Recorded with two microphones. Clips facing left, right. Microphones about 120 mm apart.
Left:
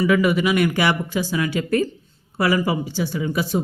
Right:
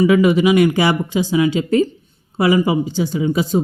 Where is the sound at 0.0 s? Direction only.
25° right (ahead or behind).